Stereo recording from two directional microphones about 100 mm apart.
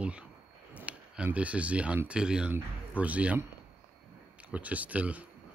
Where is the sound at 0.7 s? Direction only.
15° right (ahead or behind).